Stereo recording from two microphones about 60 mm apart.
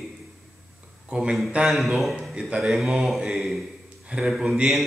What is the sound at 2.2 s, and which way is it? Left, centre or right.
Speech, centre.